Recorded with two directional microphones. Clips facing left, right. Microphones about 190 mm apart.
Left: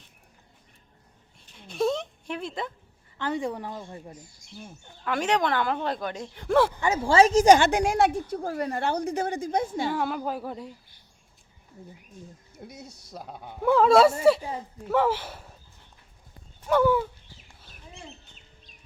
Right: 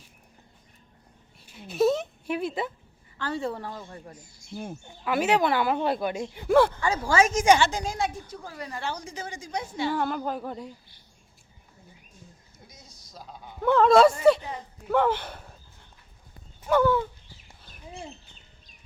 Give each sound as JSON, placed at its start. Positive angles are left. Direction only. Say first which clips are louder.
{"t": 1.5, "sound": "a sound", "louder": "right 3 dB", "side_deg": -5}
{"t": 3.2, "sound": "a woman's voice", "louder": "left 1 dB", "side_deg": 20}
{"t": 4.9, "sound": "speech", "louder": "right 2 dB", "side_deg": -5}
{"t": 6.7, "sound": "a woman's voice", "louder": "left 3 dB", "side_deg": 20}
{"t": 7.7, "sound": "a woman's voice", "louder": "left 7 dB", "side_deg": 70}
{"t": 8.4, "sound": "a woman's voice", "louder": "left 6 dB", "side_deg": 50}
{"t": 9.9, "sound": "speech", "louder": "even", "side_deg": 5}
{"t": 12.6, "sound": "a woman's voice", "louder": "left 11 dB", "side_deg": 65}
{"t": 13.6, "sound": "speech", "louder": "even", "side_deg": 5}
{"t": 16.8, "sound": "a woman's voice", "louder": "left 3 dB", "side_deg": 10}